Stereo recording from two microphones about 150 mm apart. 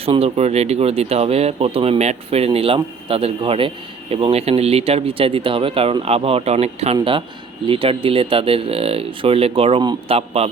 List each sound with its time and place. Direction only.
0.0 s speech: 40° right (ahead or behind)